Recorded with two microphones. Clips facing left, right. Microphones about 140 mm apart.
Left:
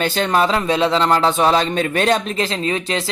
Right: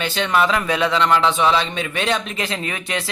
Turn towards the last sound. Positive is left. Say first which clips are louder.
# left 5 dB
turn(degrees=30)  # may be behind; listen again after turning